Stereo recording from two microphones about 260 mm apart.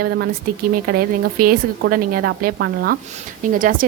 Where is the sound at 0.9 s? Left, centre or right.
Right.